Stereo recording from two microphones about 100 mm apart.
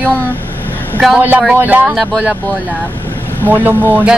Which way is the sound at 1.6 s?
15° right (ahead or behind).